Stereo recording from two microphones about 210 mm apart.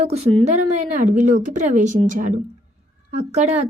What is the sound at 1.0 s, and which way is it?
A woman's voice, 35° right (ahead or behind).